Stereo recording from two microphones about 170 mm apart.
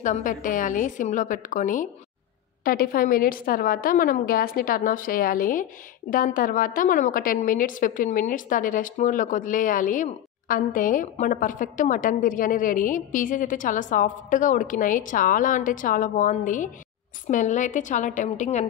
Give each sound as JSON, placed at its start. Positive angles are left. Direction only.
{"t": 0.0, "sound": "a woman's voice", "side_deg": 50}